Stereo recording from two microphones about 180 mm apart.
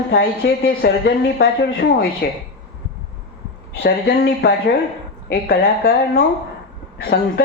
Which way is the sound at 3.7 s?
65° left (ahead or behind).